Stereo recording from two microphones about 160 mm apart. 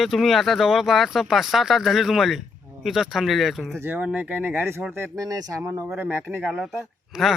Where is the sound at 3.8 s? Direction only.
15° right (ahead or behind).